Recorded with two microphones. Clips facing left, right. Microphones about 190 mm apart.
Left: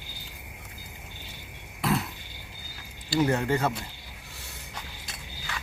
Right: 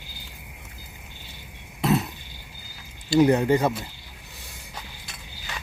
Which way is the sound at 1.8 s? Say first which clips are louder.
Right 5 dB; 20° right (ahead or behind).